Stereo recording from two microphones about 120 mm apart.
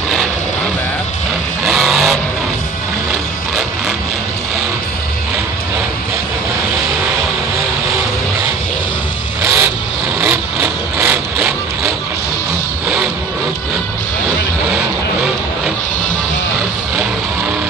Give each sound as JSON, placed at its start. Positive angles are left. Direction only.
{"t": 1.6, "sound": "vehicle", "side_deg": 0}
{"t": 9.4, "sound": "vehicle", "side_deg": -25}